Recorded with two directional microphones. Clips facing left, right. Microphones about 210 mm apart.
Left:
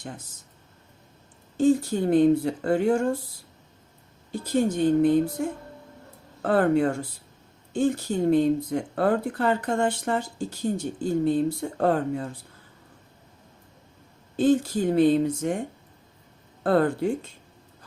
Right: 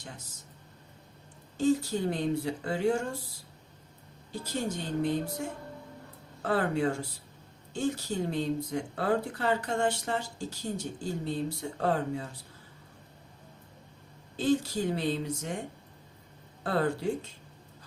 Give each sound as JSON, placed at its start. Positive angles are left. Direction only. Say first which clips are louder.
{"t": 1.5, "sound": "speech", "louder": "left 6 dB", "side_deg": 50}
{"t": 4.3, "sound": "speech", "louder": "left 9 dB", "side_deg": 55}
{"t": 14.3, "sound": "speech", "louder": "left 6 dB", "side_deg": 50}
{"t": 16.6, "sound": "speech", "louder": "left 7 dB", "side_deg": 55}